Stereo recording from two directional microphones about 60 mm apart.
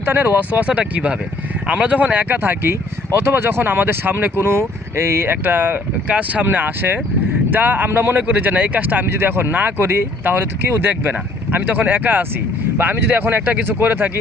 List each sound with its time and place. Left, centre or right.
0.0 s speech: right
9.0 s speech: right